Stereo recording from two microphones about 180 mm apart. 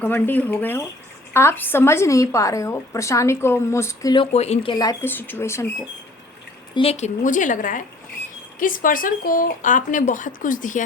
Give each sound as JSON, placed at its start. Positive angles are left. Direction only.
{"t": 0.0, "sound": "a woman's voice", "side_deg": 10}
{"t": 4.3, "sound": "a woman's voice", "side_deg": 35}
{"t": 6.7, "sound": "speech", "side_deg": 35}